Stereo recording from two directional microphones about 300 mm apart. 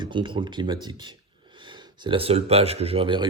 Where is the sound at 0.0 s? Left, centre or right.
Centre.